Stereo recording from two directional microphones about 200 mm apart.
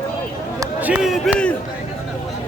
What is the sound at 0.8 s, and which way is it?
Speech, 5° right (ahead or behind).